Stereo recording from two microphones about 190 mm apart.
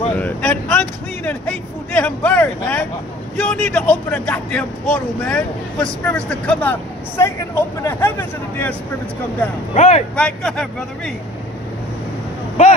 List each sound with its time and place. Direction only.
0.1 s speech: 10° left (ahead or behind)
9.8 s speech: 35° left (ahead or behind)
10.1 s speech: 5° left (ahead or behind)